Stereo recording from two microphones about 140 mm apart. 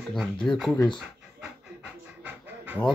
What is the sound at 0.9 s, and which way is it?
Pant, 10° right (ahead or behind).